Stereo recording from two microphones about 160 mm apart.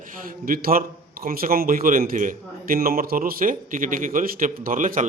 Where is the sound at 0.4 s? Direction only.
65° right (ahead or behind).